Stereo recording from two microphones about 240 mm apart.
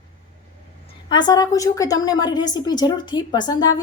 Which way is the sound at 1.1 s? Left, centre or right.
Centre.